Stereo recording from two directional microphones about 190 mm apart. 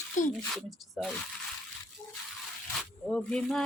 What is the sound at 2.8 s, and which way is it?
Speech, centre (ahead or behind).